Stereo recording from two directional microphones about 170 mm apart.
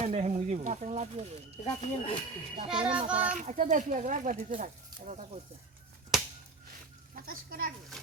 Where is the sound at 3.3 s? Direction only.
45° right (ahead or behind).